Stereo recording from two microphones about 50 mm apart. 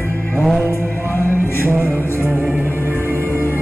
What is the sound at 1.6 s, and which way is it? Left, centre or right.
Music, right.